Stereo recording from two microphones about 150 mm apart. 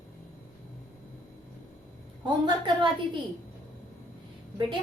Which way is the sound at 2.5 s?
30° right (ahead or behind).